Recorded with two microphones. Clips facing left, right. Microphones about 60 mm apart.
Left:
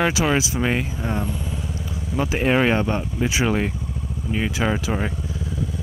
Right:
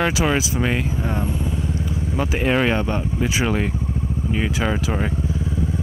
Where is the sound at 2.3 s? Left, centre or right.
Centre.